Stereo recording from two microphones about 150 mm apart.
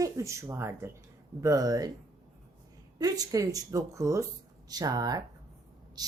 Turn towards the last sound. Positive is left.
turn(degrees=-25)  # may be behind; listen again after turning